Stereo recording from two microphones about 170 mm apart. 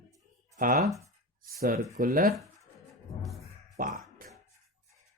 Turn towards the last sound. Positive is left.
turn(degrees=-55)  # may be behind; listen again after turning